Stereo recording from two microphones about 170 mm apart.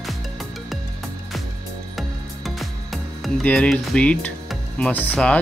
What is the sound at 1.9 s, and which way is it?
Music, centre (ahead or behind).